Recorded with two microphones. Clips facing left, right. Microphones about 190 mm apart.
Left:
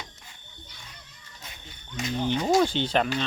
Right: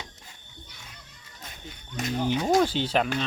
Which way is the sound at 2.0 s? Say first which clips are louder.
Right 1 dB; 50° right (ahead or behind).